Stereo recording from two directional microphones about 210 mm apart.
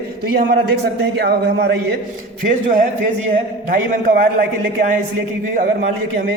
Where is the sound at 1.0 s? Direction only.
50° right (ahead or behind).